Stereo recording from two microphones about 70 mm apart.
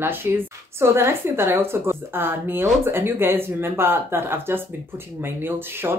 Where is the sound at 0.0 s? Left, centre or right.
Right.